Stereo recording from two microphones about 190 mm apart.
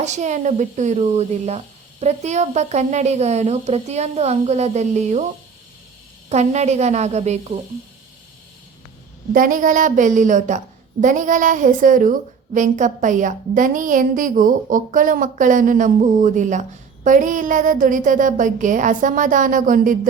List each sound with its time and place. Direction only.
0.0 s speech: 40° right (ahead or behind)
6.2 s speech: 35° right (ahead or behind)
9.3 s a woman's voice: 45° right (ahead or behind)